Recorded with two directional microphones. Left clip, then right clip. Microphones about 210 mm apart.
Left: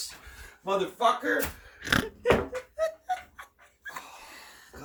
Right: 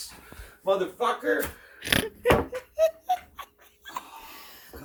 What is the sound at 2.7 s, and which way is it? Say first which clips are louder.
Snicker: right 7 dB; 5° right (ahead or behind).